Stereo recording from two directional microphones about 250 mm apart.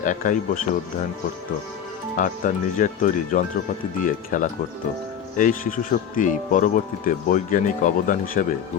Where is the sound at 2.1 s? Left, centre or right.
Left.